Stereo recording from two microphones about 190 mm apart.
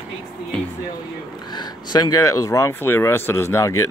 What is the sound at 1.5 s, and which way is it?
Speech, 20° left (ahead or behind).